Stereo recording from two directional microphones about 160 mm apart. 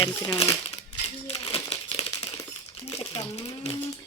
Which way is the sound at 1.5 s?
35° left (ahead or behind).